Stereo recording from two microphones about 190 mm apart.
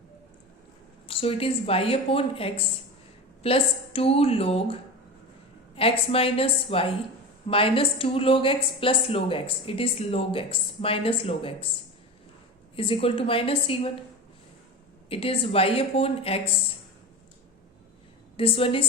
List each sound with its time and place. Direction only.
1.0 s a woman's voice: 30° left (ahead or behind)
12.7 s a woman's voice: 30° left (ahead or behind)
15.1 s a woman's voice: 30° left (ahead or behind)
18.3 s a woman's voice: 30° left (ahead or behind)